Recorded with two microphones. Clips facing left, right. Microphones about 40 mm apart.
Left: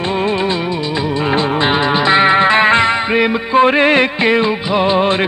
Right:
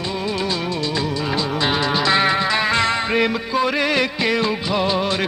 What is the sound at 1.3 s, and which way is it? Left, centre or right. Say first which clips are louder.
Music: left 7 dB; left.